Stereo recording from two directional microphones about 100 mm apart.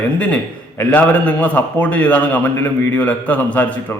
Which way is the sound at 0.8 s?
20° left (ahead or behind).